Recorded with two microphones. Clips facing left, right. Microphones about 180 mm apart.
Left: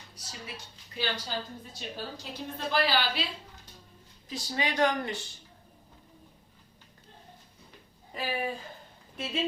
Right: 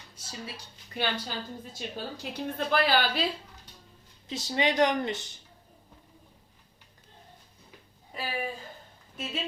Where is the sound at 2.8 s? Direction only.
50° right (ahead or behind).